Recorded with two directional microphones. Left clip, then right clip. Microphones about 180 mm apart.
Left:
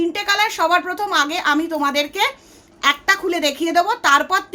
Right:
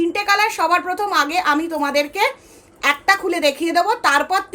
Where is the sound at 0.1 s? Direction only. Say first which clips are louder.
Right 1 dB; 15° left (ahead or behind).